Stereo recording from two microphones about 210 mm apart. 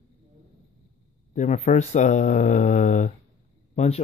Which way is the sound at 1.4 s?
35° left (ahead or behind).